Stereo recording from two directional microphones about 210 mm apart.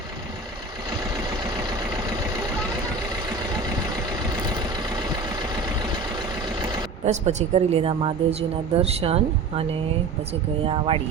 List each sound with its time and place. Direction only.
7.0 s speech: 35° right (ahead or behind)
10.7 s speech: 25° right (ahead or behind)